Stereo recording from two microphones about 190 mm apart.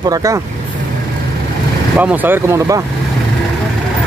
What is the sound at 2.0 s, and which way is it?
Speech, 10° right (ahead or behind).